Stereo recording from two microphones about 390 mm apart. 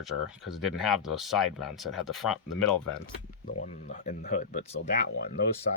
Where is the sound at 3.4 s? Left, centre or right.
Centre.